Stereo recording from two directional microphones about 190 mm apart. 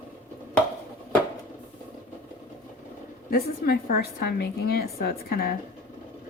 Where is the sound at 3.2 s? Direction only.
55° left (ahead or behind).